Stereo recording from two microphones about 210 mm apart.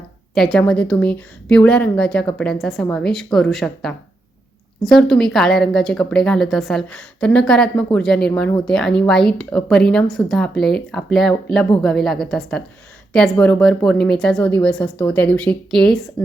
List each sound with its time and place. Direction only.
0.3 s speech: centre (ahead or behind)